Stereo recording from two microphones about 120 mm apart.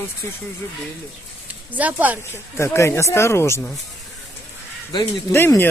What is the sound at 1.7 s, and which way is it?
Speech, 15° right (ahead or behind).